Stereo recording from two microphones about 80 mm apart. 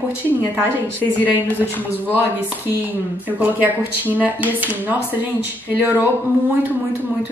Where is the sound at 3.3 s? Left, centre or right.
Right.